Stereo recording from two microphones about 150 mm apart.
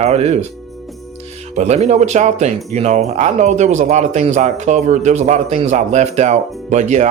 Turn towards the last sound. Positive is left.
turn(degrees=-50)  # may be behind; listen again after turning